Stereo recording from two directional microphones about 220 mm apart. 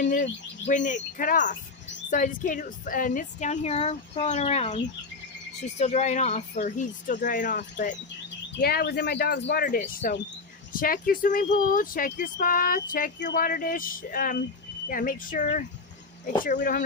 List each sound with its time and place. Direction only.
0.0 s speech: 35° left (ahead or behind)
8.6 s speech: 45° left (ahead or behind)